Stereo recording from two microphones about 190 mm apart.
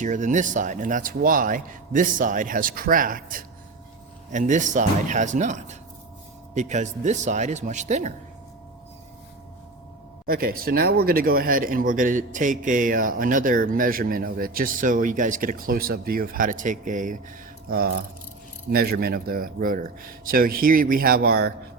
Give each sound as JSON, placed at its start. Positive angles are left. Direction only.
{"t": 0.0, "sound": "speech", "side_deg": -40}
{"t": 10.2, "sound": "speech", "side_deg": -50}